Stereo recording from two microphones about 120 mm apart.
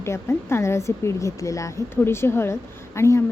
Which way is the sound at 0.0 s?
20° left (ahead or behind).